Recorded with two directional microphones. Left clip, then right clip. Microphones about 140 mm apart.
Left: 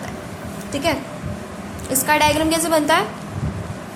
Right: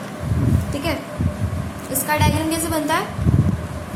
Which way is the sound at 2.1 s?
65° left (ahead or behind).